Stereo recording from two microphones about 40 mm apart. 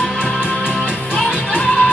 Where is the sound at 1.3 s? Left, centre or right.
Left.